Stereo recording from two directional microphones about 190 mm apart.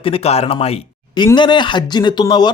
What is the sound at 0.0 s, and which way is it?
A man's voice, 30° left (ahead or behind).